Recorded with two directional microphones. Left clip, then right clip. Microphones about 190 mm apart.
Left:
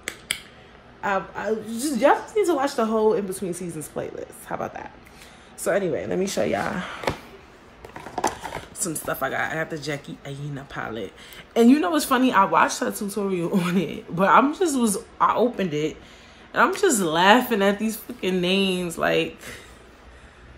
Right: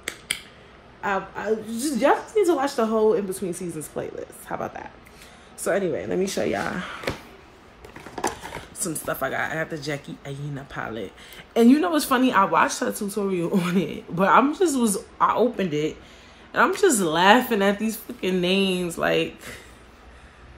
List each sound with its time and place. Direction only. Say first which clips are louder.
1.0 s a woman's voice: left 1 dB; 20° left (ahead or behind)
5.6 s a woman's voice: left 1 dB; 15° left (ahead or behind)
8.7 s speech: right 1 dB; 5° right (ahead or behind)